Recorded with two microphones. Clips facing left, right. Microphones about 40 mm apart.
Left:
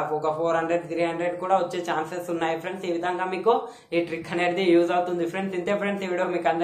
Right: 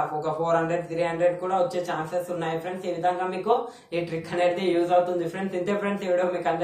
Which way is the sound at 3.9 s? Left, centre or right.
Left.